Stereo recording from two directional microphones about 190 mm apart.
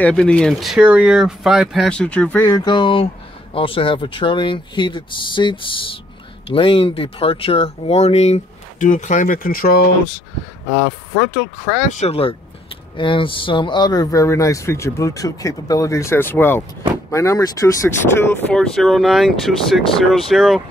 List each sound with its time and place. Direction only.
0.0 s speech: 5° left (ahead or behind)
2.4 s speech: 25° left (ahead or behind); by 9.8 s 50° left (ahead or behind)
11.9 s speech: 35° left (ahead or behind); by 20.6 s centre (ahead or behind)